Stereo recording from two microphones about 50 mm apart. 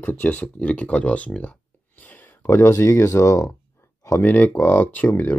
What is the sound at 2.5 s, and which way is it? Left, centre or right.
Speech, left.